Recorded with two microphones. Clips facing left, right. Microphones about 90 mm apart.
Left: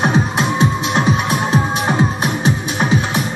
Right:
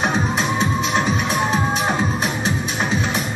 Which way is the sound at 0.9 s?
55° left (ahead or behind).